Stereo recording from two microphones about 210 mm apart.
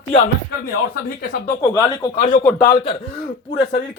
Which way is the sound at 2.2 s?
40° left (ahead or behind).